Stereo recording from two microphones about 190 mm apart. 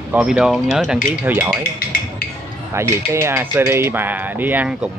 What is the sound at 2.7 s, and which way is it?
Speech, 15° right (ahead or behind).